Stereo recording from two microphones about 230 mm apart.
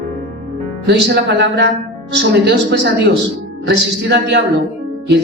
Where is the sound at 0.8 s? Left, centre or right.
Right.